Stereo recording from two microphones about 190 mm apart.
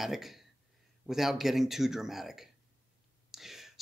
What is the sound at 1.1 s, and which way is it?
Speech, centre (ahead or behind).